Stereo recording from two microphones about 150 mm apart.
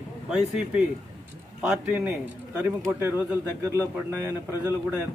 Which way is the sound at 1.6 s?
5° right (ahead or behind).